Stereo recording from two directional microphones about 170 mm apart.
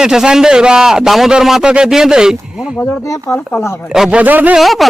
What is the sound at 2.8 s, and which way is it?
Speech, 15° left (ahead or behind).